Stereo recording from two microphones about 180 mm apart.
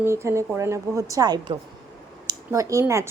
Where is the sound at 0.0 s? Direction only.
15° right (ahead or behind).